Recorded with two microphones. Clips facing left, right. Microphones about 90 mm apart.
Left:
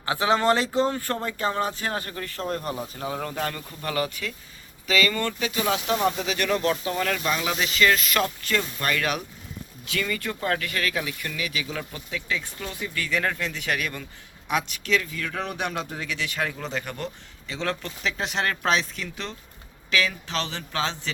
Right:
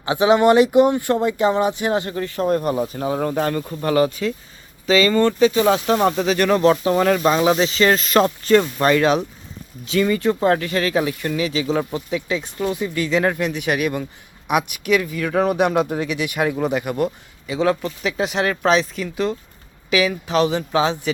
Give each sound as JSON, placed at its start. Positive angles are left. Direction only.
{"t": 0.0, "sound": "speech", "side_deg": -20}
{"t": 3.0, "sound": "speech", "side_deg": -35}
{"t": 6.0, "sound": "speech", "side_deg": -55}
{"t": 11.9, "sound": "speech", "side_deg": -20}